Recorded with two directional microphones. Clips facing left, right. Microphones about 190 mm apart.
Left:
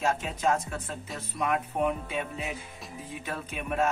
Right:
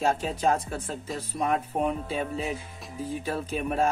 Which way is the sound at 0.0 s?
30° right (ahead or behind).